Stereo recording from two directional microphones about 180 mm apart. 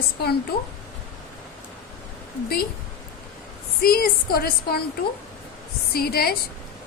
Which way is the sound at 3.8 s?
55° left (ahead or behind).